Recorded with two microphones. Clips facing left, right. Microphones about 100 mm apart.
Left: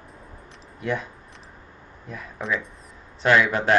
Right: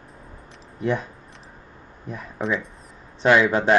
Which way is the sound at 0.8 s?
30° right (ahead or behind).